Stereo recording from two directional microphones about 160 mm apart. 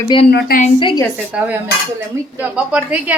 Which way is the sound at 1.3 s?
10° right (ahead or behind).